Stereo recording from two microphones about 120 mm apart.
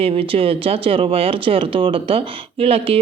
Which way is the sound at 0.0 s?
55° right (ahead or behind).